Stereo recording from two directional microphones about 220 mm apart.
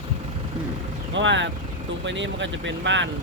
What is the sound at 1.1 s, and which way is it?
Speech, 55° right (ahead or behind).